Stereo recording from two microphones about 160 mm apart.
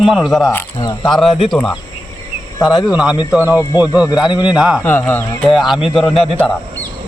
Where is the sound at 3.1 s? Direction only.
25° left (ahead or behind).